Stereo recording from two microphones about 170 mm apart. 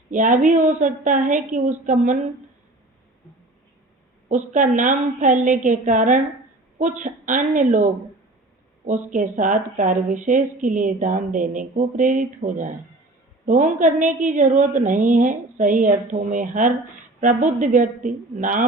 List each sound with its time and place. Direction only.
0.1 s a woman's voice: 50° right (ahead or behind)
4.3 s a woman's voice: 50° right (ahead or behind)
9.1 s a woman's voice: 50° right (ahead or behind)